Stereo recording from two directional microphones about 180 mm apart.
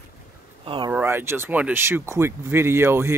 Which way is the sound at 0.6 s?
30° right (ahead or behind).